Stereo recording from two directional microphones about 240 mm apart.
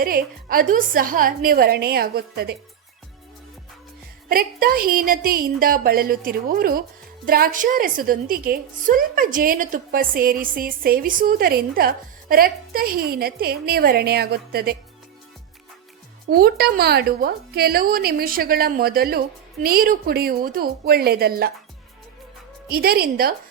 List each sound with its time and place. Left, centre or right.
0.0 s a woman's voice: right
4.3 s a woman's voice: right
16.3 s a woman's voice: right
22.7 s a woman's voice: right